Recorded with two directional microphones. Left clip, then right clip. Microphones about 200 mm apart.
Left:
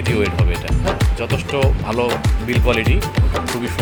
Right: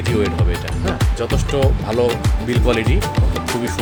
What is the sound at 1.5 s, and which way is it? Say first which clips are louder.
Speech: right 1 dB; 10° right (ahead or behind).